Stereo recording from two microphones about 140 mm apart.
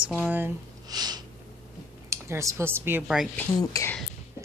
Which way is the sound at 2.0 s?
20° right (ahead or behind).